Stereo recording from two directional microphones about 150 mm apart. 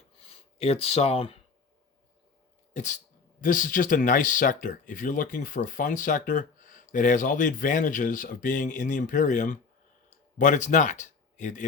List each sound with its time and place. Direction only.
0.6 s speech: 45° left (ahead or behind)
3.4 s speech: 60° left (ahead or behind)